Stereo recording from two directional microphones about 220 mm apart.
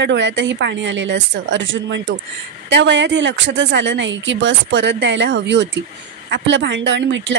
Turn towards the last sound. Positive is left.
turn(degrees=-55)  # may be behind; listen again after turning